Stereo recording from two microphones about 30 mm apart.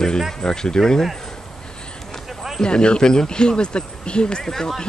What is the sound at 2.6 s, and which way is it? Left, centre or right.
Speech, left.